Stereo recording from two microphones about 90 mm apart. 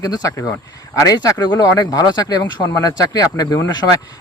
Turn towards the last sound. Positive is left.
turn(degrees=45)  # may be behind; listen again after turning